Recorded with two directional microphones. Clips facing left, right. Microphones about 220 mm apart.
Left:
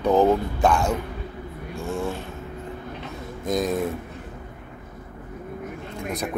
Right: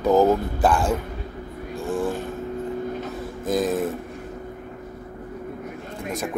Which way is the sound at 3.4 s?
5° right (ahead or behind).